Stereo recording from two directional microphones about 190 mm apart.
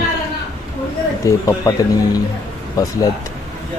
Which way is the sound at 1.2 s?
15° left (ahead or behind).